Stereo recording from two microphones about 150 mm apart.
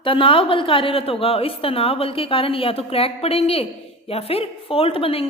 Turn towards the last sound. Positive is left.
turn(degrees=40)  # may be behind; listen again after turning